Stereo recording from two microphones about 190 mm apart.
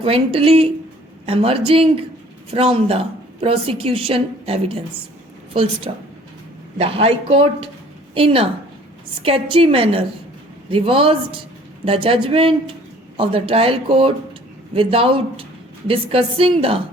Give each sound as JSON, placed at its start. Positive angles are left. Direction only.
{"t": 0.0, "sound": "a woman's voice", "side_deg": -30}
{"t": 5.9, "sound": "a woman's voice", "side_deg": -30}